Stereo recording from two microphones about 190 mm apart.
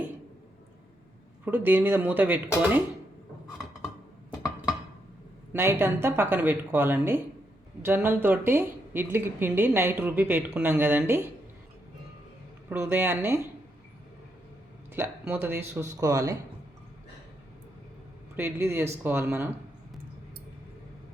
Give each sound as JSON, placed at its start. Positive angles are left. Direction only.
{"t": 1.5, "sound": "speech", "side_deg": -10}
{"t": 5.5, "sound": "speech", "side_deg": -10}
{"t": 12.6, "sound": "speech", "side_deg": -10}
{"t": 15.0, "sound": "speech", "side_deg": -10}
{"t": 18.3, "sound": "speech", "side_deg": -15}